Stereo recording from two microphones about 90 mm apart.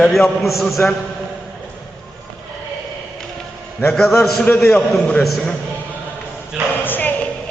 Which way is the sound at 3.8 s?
10° left (ahead or behind).